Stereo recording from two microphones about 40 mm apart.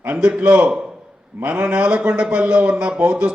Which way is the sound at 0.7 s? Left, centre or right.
Centre.